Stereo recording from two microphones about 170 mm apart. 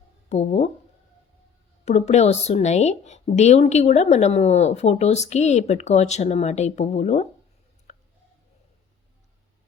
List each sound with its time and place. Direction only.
0.3 s a woman's voice: 40° left (ahead or behind)
1.8 s a woman's voice: 40° left (ahead or behind)